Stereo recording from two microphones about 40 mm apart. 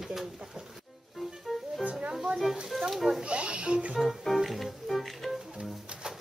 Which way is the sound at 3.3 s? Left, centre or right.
Right.